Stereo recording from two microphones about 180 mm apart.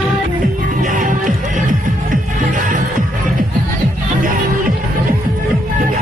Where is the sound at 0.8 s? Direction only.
45° right (ahead or behind).